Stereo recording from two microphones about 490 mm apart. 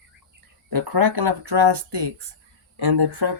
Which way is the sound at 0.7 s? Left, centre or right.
Right.